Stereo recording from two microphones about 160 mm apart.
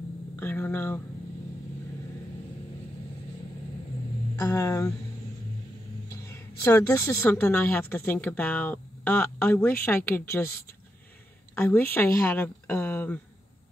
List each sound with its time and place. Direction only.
0.4 s a woman's voice: 15° left (ahead or behind)
4.4 s a woman's voice: 20° left (ahead or behind)
6.2 s a woman's voice: 15° left (ahead or behind)
11.5 s a woman's voice: 10° left (ahead or behind)